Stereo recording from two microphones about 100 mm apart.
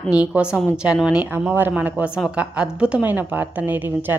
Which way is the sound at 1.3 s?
20° right (ahead or behind).